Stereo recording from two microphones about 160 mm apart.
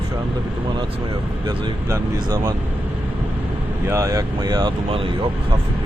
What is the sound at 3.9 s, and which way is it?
Speech, 20° right (ahead or behind).